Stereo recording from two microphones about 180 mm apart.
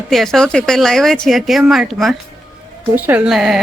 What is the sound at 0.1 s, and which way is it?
Speech, centre (ahead or behind).